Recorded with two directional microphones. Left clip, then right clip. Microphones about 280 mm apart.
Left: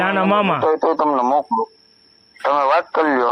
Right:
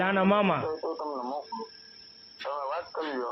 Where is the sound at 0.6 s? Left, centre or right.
Left.